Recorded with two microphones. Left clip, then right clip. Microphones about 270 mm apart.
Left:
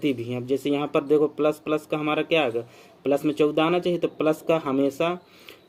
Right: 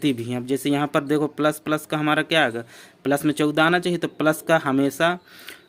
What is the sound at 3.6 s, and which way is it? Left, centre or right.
Speech, right.